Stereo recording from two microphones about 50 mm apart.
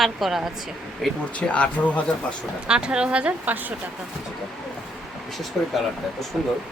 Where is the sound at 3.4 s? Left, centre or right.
Right.